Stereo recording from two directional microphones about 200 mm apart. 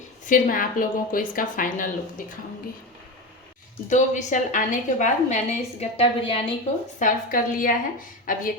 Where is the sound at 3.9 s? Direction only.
40° left (ahead or behind).